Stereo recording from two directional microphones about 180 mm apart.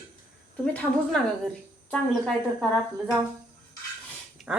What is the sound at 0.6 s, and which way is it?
A woman's voice, 5° left (ahead or behind).